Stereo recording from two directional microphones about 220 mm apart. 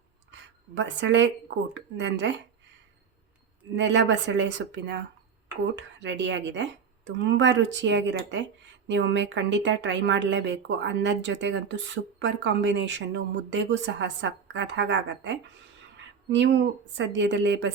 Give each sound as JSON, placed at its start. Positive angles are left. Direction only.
{"t": 0.8, "sound": "a woman's voice", "side_deg": -55}
{"t": 3.8, "sound": "a woman's voice", "side_deg": -55}